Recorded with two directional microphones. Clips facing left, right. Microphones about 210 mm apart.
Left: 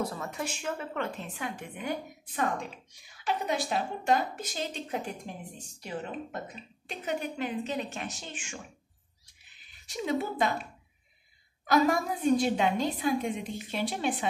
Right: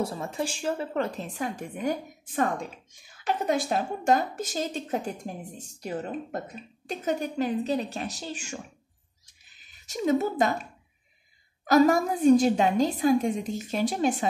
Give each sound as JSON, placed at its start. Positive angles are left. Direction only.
{"t": 0.0, "sound": "a woman's voice", "side_deg": -30}
{"t": 3.4, "sound": "a woman's voice", "side_deg": -45}
{"t": 9.8, "sound": "a woman's voice", "side_deg": -45}
{"t": 11.6, "sound": "a woman's voice", "side_deg": -40}